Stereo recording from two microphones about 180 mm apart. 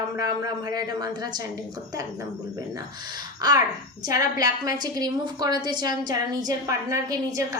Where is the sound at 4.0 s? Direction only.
20° right (ahead or behind).